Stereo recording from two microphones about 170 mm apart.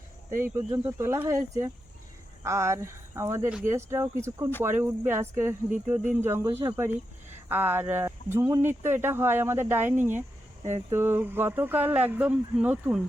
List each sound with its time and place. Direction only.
0.4 s speech: 15° right (ahead or behind)
10.6 s speech: 40° right (ahead or behind)
10.9 s speech: 15° right (ahead or behind)